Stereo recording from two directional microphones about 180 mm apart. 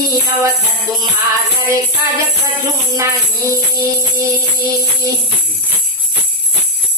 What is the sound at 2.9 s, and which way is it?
Music, 15° right (ahead or behind).